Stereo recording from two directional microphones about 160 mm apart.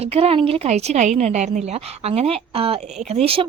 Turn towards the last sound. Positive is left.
turn(degrees=-35)  # may be behind; listen again after turning